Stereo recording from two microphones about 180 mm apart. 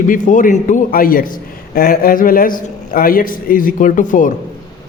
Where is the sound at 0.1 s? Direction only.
45° left (ahead or behind).